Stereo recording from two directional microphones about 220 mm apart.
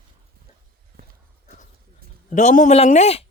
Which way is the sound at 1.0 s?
45° right (ahead or behind).